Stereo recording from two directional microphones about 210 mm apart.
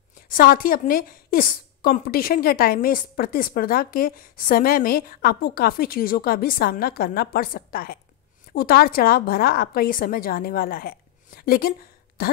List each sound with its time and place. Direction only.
0.3 s a woman's voice: 45° left (ahead or behind)